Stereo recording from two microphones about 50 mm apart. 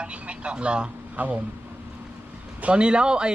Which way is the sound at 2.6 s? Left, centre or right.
Right.